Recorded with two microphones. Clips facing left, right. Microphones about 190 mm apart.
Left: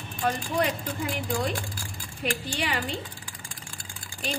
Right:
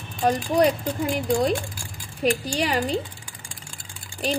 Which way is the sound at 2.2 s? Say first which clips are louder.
Right 7 dB; 40° right (ahead or behind).